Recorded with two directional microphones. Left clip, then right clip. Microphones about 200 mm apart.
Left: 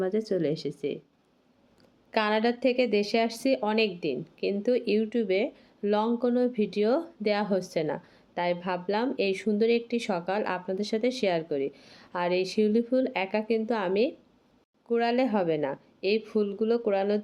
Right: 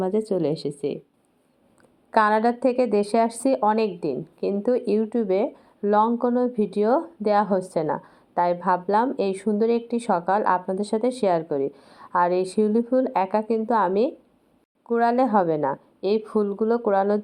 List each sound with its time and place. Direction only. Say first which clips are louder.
0.0 s a woman's voice: right 4 dB; 15° right (ahead or behind)
2.1 s a woman's voice: right 7 dB; 5° right (ahead or behind)
7.8 s a woman's voice: right 5 dB; 15° left (ahead or behind)
8.4 s a woman's voice: right 8 dB; 5° right (ahead or behind)